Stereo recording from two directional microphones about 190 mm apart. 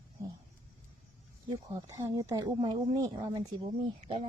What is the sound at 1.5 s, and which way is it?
Speech, 20° right (ahead or behind).